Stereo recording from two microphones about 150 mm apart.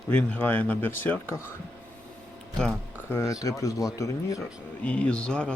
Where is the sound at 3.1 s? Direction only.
15° left (ahead or behind).